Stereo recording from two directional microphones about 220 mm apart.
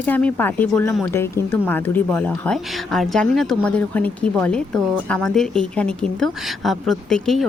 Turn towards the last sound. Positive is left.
turn(degrees=0)  # may be behind; listen again after turning